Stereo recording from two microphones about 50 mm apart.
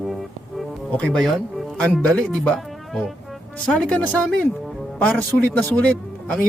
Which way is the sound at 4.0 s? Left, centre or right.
Left.